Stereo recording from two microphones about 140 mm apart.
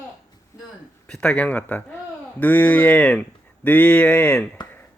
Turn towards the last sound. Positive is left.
turn(degrees=10)  # may be behind; listen again after turning